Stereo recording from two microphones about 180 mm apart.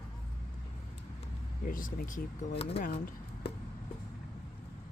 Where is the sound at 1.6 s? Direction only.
50° left (ahead or behind).